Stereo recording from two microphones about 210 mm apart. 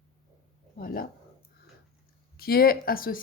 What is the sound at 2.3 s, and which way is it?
Speech, 45° left (ahead or behind).